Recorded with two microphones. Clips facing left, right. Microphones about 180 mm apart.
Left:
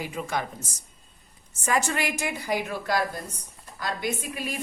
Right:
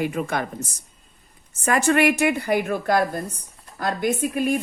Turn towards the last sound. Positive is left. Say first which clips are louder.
# right 10 dB
turn(degrees=-50)  # may be behind; listen again after turning